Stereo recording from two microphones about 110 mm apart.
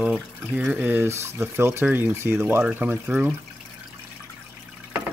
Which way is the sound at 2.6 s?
15° right (ahead or behind).